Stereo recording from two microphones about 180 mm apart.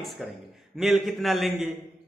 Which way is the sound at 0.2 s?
5° left (ahead or behind).